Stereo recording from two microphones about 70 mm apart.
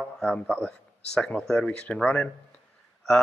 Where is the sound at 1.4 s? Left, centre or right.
Centre.